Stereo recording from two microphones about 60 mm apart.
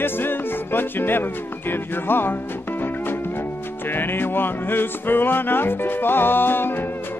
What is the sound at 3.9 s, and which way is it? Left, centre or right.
Music, left.